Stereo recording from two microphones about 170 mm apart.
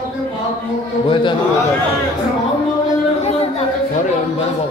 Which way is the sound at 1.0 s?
30° left (ahead or behind).